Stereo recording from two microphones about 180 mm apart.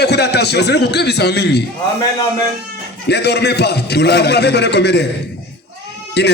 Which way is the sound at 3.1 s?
65° left (ahead or behind).